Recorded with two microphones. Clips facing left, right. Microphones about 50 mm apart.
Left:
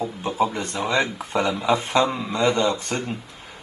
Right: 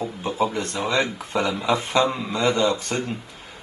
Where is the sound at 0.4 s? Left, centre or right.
Centre.